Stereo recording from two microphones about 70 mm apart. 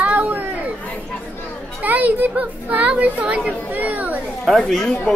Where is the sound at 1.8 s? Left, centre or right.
Right.